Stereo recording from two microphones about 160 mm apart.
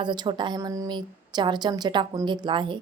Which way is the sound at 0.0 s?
30° right (ahead or behind).